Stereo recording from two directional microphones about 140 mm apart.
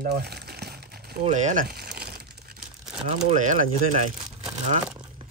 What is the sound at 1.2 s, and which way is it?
Crumpling, 60° right (ahead or behind).